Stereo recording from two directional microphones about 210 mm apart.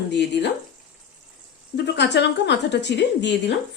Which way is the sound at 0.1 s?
55° left (ahead or behind).